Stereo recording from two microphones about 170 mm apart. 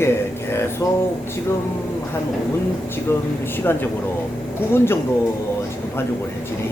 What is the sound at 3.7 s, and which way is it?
Speech, 10° left (ahead or behind).